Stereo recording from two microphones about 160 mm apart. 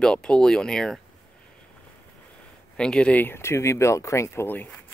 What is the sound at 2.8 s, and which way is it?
Speech, 5° left (ahead or behind).